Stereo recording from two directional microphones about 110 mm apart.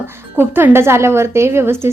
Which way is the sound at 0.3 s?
20° right (ahead or behind).